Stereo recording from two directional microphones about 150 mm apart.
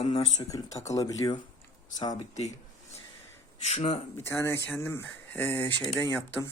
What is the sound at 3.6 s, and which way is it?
Speech, 50° left (ahead or behind).